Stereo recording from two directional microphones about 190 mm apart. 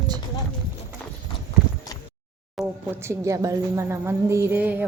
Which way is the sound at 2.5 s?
10° right (ahead or behind).